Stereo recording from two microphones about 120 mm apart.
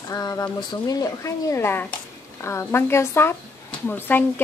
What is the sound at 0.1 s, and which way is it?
A woman's voice, 30° left (ahead or behind).